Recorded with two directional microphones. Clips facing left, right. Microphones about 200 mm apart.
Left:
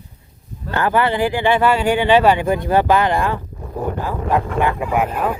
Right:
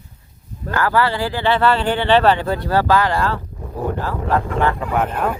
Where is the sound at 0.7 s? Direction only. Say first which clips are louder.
Left 1 dB; 20° left (ahead or behind).